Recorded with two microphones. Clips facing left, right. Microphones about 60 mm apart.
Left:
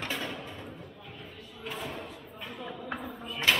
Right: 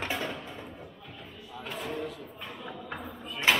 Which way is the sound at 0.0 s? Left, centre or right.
Centre.